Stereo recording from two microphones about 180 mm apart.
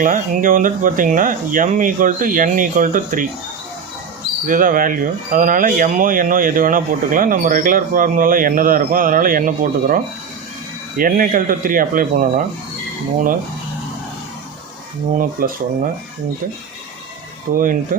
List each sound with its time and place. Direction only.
0.0 s speech: 50° right (ahead or behind)
4.4 s speech: 50° right (ahead or behind)
15.2 s speech: 55° right (ahead or behind)
17.5 s speech: 50° right (ahead or behind)